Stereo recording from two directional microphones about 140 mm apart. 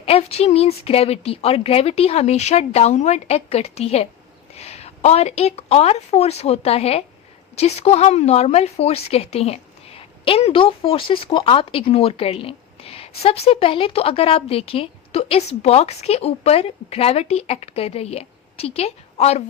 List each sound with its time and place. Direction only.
0.0 s a woman's voice: 45° left (ahead or behind)